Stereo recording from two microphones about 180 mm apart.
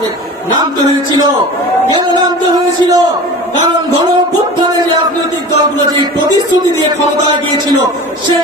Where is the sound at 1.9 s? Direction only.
25° right (ahead or behind).